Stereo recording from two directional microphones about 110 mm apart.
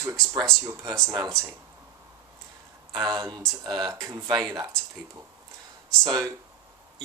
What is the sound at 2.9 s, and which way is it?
Speech, 45° right (ahead or behind).